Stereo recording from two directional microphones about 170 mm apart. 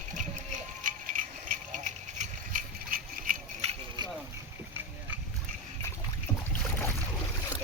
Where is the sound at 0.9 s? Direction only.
50° right (ahead or behind).